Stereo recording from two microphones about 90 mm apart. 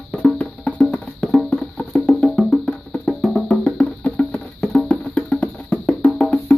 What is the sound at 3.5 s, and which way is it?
Music, 15° left (ahead or behind).